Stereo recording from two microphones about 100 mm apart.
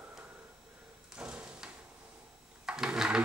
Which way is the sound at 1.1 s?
10° right (ahead or behind).